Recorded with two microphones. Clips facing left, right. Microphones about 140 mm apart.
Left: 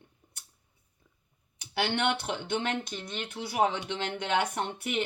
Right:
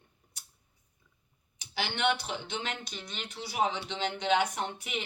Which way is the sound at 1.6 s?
55° left (ahead or behind).